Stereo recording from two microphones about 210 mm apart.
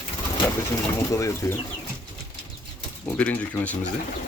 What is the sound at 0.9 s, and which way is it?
Speech, 15° left (ahead or behind).